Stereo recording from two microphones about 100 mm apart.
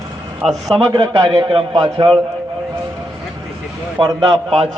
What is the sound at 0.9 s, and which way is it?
Speech, 50° right (ahead or behind).